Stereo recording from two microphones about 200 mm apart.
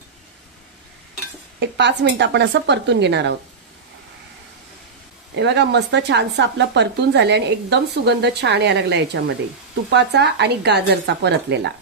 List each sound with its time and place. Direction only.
1.6 s speech: 60° right (ahead or behind)
5.3 s speech: 60° right (ahead or behind)